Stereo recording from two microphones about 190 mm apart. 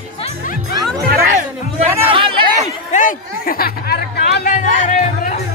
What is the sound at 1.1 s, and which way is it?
Music, 45° right (ahead or behind).